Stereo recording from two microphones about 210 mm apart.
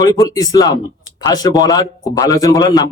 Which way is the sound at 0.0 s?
15° left (ahead or behind).